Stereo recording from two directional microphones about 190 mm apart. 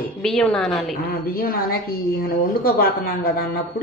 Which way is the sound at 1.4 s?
50° left (ahead or behind).